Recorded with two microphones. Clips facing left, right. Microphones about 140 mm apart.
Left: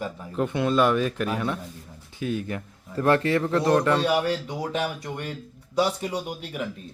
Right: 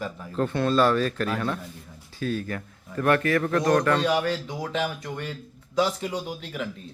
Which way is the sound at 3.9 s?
10° left (ahead or behind).